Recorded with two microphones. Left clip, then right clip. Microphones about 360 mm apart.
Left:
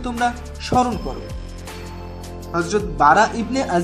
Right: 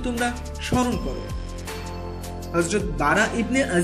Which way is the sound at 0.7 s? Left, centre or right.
Left.